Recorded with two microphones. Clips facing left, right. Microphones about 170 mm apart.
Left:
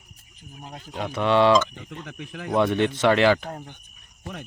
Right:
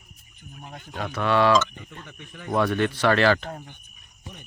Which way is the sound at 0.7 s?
15° left (ahead or behind).